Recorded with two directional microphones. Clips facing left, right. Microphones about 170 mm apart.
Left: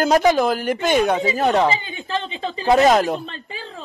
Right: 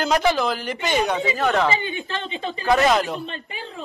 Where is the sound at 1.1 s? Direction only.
40° left (ahead or behind).